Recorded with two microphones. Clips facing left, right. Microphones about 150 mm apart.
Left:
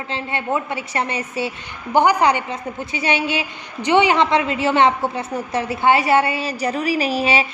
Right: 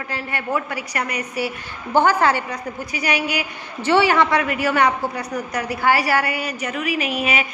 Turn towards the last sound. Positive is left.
turn(degrees=30)  # may be behind; listen again after turning